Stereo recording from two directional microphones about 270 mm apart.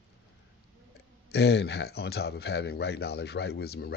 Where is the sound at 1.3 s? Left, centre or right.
Left.